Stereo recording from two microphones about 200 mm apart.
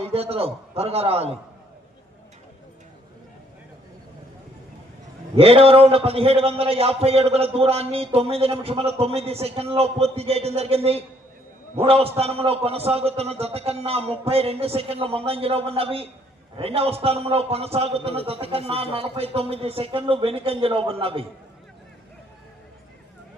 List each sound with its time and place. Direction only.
0.0 s a man's voice: 30° right (ahead or behind)
5.4 s a man's voice: 30° right (ahead or behind)